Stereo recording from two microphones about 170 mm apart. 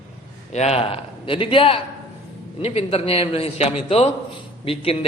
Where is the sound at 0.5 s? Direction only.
40° left (ahead or behind).